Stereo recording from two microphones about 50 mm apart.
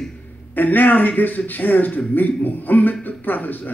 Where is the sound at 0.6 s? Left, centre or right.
Left.